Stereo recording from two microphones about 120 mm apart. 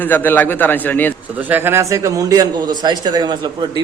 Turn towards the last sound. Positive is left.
turn(degrees=-35)  # may be behind; listen again after turning